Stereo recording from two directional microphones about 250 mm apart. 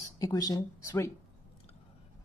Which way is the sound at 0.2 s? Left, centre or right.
Centre.